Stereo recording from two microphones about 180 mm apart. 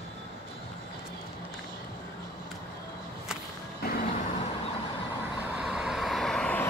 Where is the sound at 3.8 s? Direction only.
55° left (ahead or behind).